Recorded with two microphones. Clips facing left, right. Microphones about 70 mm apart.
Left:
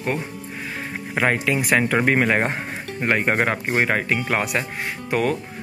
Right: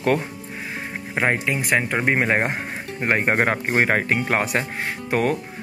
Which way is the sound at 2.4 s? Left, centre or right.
Centre.